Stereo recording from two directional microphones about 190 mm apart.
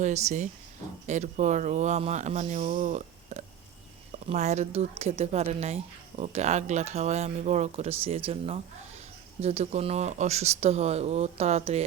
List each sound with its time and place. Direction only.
0.0 s speech: 35° right (ahead or behind)